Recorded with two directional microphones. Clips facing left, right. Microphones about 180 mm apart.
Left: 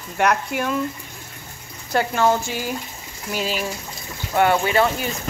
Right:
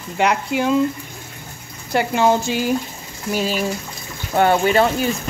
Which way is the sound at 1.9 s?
15° right (ahead or behind).